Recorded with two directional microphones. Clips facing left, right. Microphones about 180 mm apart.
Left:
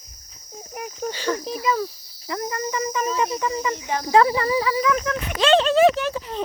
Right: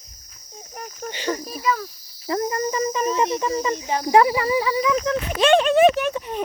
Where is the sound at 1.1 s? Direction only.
15° right (ahead or behind).